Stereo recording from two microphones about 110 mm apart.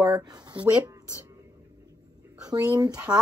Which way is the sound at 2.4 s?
35° right (ahead or behind).